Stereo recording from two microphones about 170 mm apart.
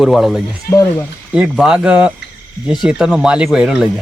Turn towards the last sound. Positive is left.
turn(degrees=-5)  # may be behind; listen again after turning